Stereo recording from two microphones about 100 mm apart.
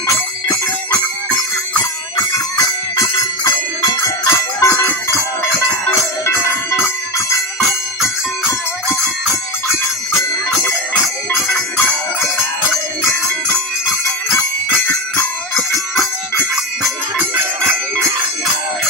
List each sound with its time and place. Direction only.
3.8 s music: 40° left (ahead or behind)
5.9 s music: 20° left (ahead or behind)